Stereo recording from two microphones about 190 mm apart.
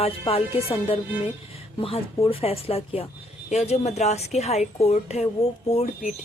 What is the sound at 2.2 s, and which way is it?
A woman's voice, 30° left (ahead or behind).